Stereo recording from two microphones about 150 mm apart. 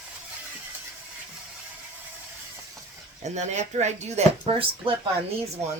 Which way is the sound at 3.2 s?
50° right (ahead or behind).